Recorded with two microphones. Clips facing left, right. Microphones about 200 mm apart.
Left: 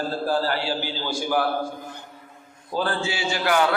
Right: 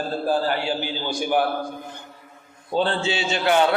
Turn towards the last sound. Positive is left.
turn(degrees=-25)  # may be behind; listen again after turning